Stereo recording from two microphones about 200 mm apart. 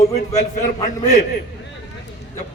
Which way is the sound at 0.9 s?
40° left (ahead or behind).